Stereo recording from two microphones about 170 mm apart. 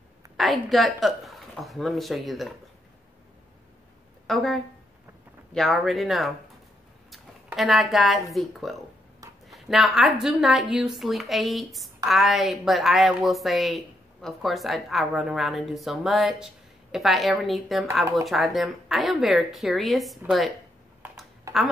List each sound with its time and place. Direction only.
0.4 s a woman's voice: centre (ahead or behind)
4.3 s a woman's voice: centre (ahead or behind)
7.5 s a woman's voice: centre (ahead or behind)
21.5 s quack: 20° right (ahead or behind)